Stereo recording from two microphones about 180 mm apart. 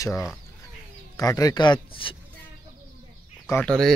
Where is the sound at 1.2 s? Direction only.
20° left (ahead or behind).